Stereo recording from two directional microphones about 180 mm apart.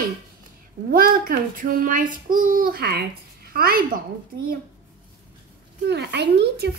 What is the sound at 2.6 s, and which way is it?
A child's voice, 60° right (ahead or behind).